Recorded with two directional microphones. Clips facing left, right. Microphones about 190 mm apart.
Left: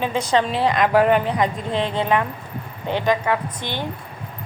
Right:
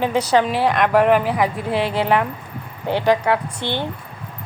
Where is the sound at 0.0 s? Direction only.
10° right (ahead or behind).